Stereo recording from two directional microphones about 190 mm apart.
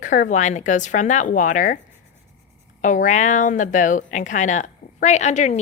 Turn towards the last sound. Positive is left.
turn(degrees=40)  # may be behind; listen again after turning